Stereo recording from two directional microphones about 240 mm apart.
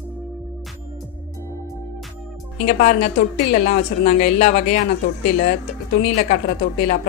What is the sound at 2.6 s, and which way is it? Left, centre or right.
Speech, left.